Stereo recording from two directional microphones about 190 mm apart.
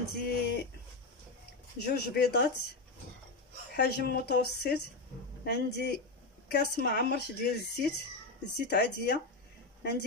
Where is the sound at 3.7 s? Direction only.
60° left (ahead or behind).